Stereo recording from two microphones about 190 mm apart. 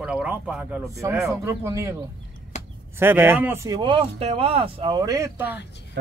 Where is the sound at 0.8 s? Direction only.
15° right (ahead or behind).